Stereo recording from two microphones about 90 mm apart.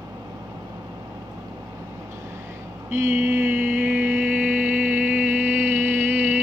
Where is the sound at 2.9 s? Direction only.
25° right (ahead or behind).